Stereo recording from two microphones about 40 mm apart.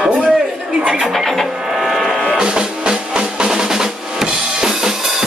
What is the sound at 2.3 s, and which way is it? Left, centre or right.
Music, right.